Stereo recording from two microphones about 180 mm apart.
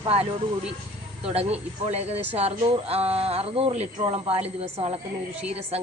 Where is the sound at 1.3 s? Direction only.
35° right (ahead or behind).